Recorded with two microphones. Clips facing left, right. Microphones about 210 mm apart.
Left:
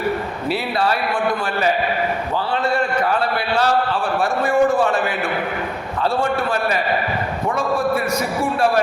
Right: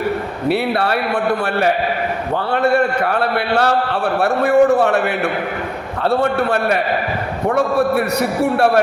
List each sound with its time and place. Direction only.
0.4 s a man's voice: 60° right (ahead or behind)